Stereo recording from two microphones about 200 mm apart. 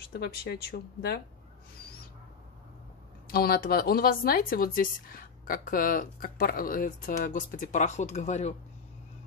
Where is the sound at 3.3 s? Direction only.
50° left (ahead or behind).